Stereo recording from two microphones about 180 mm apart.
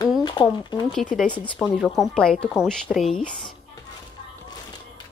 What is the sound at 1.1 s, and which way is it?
Speech, 5° left (ahead or behind).